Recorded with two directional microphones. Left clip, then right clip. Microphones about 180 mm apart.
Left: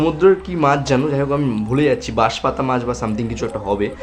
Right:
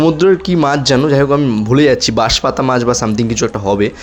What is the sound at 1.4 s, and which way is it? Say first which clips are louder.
Speech: right 6 dB; 15° right (ahead or behind).